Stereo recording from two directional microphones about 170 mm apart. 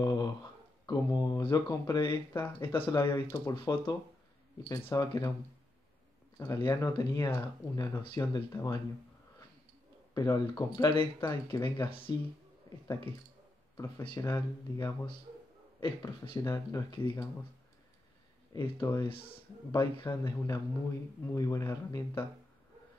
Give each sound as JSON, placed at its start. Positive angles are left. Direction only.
{"t": 0.0, "sound": "speech", "side_deg": 25}
{"t": 6.3, "sound": "speech", "side_deg": 20}
{"t": 10.1, "sound": "speech", "side_deg": 25}
{"t": 12.6, "sound": "speech", "side_deg": 20}
{"t": 14.1, "sound": "speech", "side_deg": 25}
{"t": 18.5, "sound": "speech", "side_deg": 20}